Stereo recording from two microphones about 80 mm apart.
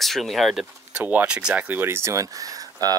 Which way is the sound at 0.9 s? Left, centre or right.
Right.